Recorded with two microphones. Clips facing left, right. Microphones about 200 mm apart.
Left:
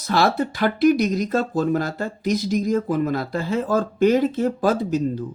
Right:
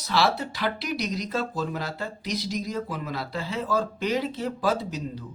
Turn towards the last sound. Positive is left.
turn(degrees=50)  # may be behind; listen again after turning